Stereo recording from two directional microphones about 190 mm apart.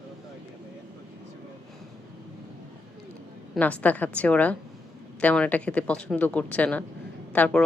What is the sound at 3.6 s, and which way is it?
A woman's voice, 5° left (ahead or behind).